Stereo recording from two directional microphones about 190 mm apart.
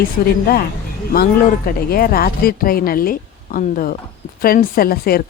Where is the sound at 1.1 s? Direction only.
50° left (ahead or behind).